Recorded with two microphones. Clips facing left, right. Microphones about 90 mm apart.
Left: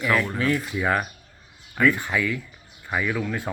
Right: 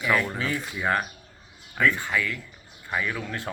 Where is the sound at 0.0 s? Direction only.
Centre (ahead or behind).